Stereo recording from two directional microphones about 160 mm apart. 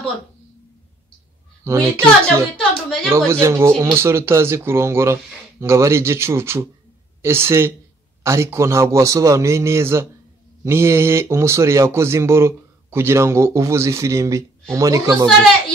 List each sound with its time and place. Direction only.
1.6 s a woman's voice: 20° right (ahead or behind)
2.5 s speech: 5° left (ahead or behind)
3.1 s speech: 15° right (ahead or behind)